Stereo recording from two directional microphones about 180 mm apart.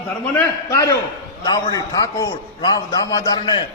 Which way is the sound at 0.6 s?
20° left (ahead or behind).